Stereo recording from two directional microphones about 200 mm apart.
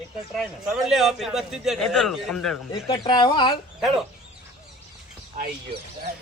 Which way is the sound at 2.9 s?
25° left (ahead or behind).